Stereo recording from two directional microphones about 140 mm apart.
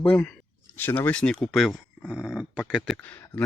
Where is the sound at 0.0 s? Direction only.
10° left (ahead or behind).